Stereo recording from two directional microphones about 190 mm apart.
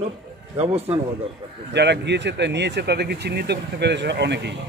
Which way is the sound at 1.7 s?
65° right (ahead or behind).